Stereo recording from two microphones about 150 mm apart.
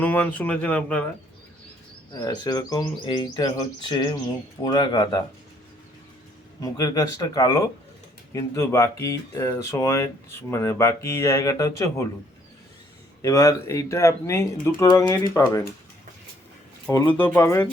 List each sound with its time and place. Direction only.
0.0 s speech: 10° left (ahead or behind)
2.1 s speech: 25° left (ahead or behind)
6.6 s speech: 25° left (ahead or behind)
13.2 s speech: 20° left (ahead or behind)
16.9 s speech: 15° left (ahead or behind)